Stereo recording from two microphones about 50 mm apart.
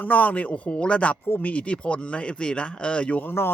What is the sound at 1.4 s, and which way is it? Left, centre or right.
Speech, left.